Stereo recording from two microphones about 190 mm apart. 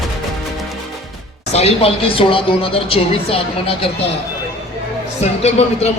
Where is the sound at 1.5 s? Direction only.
35° left (ahead or behind).